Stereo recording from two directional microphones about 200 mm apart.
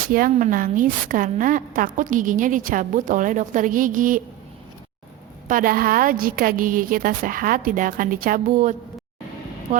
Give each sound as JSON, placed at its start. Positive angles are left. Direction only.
{"t": 0.1, "sound": "a woman's voice", "side_deg": -45}
{"t": 5.5, "sound": "a woman's voice", "side_deg": -45}